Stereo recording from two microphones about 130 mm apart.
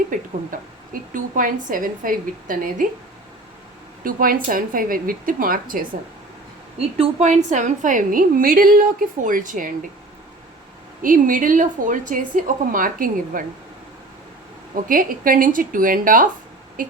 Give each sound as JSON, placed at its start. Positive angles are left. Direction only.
{"t": 0.1, "sound": "a woman's voice", "side_deg": -90}
{"t": 4.0, "sound": "a woman's voice", "side_deg": -90}
{"t": 6.7, "sound": "a woman's voice", "side_deg": -55}
{"t": 11.0, "sound": "a woman's voice", "side_deg": -90}
{"t": 14.8, "sound": "a woman's voice", "side_deg": -90}